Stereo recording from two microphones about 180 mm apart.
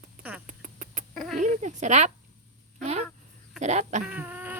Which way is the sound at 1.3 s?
45° right (ahead or behind).